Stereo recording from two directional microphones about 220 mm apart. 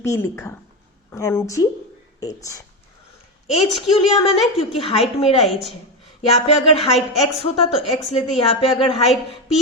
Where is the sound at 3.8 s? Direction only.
25° left (ahead or behind).